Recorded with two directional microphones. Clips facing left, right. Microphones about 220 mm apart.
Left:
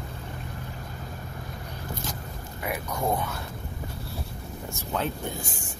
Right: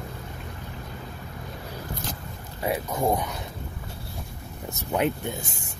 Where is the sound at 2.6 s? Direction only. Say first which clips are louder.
Right 4 dB; 25° right (ahead or behind).